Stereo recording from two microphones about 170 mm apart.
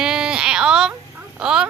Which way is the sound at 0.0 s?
5° right (ahead or behind).